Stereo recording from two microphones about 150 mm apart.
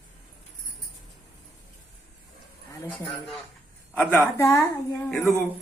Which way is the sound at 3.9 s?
15° left (ahead or behind).